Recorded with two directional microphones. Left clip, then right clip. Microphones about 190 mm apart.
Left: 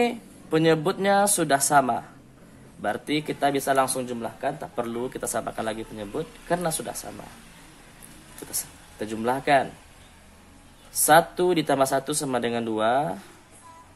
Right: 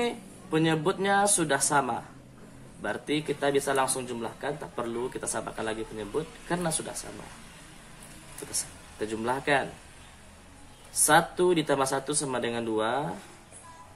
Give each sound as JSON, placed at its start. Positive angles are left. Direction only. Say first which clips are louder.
{"t": 0.0, "sound": "speech", "louder": "left 6 dB", "side_deg": 45}
{"t": 8.5, "sound": "speech", "louder": "even", "side_deg": 45}
{"t": 10.9, "sound": "speech", "louder": "left 5 dB", "side_deg": 45}